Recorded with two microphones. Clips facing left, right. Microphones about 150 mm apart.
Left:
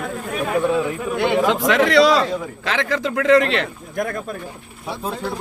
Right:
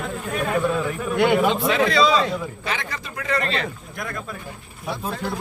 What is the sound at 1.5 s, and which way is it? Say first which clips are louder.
Speech: left 3 dB; 85° left.